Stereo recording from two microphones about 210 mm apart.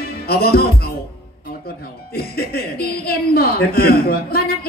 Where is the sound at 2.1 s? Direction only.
50° left (ahead or behind).